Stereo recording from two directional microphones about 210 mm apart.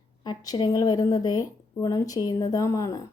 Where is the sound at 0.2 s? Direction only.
20° left (ahead or behind).